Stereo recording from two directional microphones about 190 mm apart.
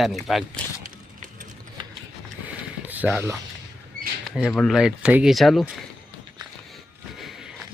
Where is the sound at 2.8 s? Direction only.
10° right (ahead or behind).